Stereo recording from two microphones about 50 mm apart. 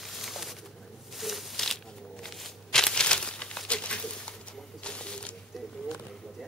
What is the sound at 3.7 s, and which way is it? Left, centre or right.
Pigeon, left.